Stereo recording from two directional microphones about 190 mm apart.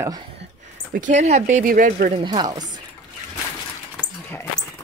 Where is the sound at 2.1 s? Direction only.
20° right (ahead or behind).